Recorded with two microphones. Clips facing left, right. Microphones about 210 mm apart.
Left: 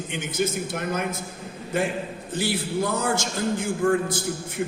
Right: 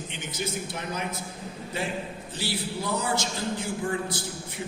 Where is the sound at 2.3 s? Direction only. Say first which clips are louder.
Left 7 dB; 50° left (ahead or behind).